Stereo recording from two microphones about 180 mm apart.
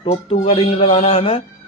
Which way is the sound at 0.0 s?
35° left (ahead or behind).